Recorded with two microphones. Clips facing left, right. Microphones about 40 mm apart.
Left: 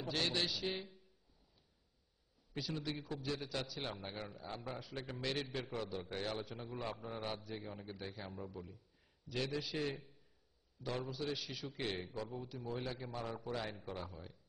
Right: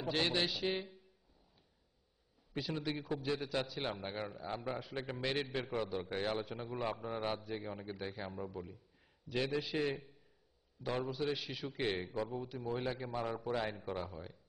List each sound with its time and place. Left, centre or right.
0.0 s a man's voice: right
2.6 s a man's voice: right
9.3 s a man's voice: right